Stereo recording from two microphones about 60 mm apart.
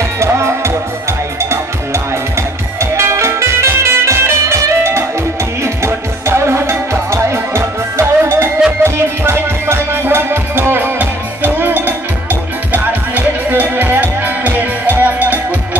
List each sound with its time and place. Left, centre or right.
0.2 s music: right
2.3 s music: right